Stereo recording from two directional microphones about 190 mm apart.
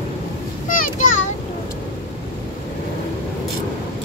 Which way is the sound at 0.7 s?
45° left (ahead or behind).